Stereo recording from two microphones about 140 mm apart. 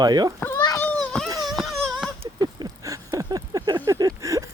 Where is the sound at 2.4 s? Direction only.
30° right (ahead or behind).